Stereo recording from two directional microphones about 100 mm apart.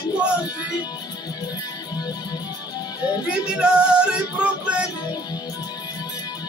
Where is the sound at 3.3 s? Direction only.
10° right (ahead or behind).